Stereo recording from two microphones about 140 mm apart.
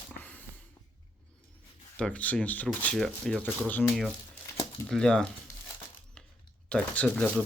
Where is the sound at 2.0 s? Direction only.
10° left (ahead or behind).